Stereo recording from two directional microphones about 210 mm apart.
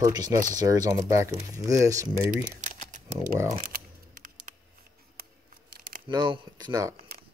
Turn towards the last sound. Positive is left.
turn(degrees=-20)  # may be behind; listen again after turning